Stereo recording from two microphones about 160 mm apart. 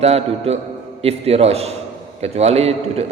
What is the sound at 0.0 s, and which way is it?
A man's voice, 40° right (ahead or behind).